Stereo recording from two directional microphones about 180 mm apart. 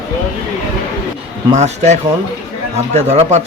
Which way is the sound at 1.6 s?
40° right (ahead or behind).